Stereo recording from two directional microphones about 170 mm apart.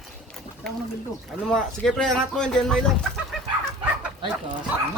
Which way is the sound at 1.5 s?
Centre (ahead or behind).